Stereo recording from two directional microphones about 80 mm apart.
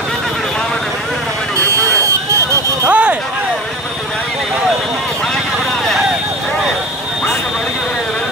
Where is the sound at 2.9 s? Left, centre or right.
Centre.